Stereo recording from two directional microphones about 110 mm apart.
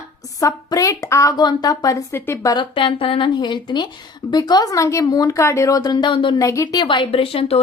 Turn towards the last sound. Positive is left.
turn(degrees=60)  # may be behind; listen again after turning